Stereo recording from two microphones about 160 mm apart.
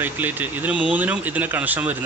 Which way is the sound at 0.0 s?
10° right (ahead or behind).